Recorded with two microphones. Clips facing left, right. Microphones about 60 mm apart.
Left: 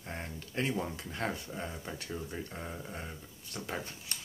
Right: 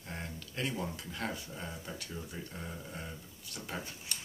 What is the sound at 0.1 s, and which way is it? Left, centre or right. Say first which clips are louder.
Speech: left 3 dB; left.